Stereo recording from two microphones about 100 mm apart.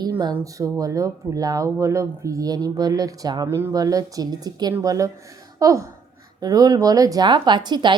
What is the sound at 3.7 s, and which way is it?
Speech, 35° right (ahead or behind).